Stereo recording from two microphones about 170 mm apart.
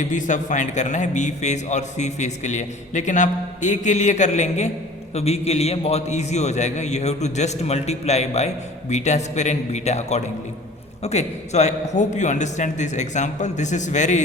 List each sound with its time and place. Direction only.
0.0 s a man's voice: 45° left (ahead or behind)